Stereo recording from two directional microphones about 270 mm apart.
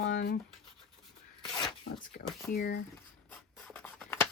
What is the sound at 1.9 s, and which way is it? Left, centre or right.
Speech, left.